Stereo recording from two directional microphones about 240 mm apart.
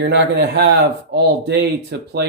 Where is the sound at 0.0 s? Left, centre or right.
Right.